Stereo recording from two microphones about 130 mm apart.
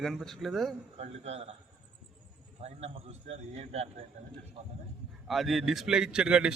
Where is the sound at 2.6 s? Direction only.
55° right (ahead or behind).